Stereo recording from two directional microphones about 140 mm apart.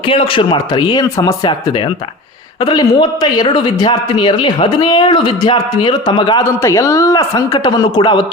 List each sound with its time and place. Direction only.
0.1 s a man's voice: 35° left (ahead or behind)
2.6 s a man's voice: 30° left (ahead or behind)
6.6 s a man's voice: 20° left (ahead or behind)